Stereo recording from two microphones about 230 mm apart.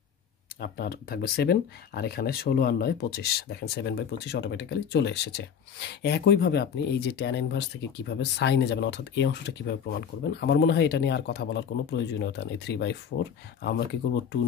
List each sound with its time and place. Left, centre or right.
0.6 s speech: left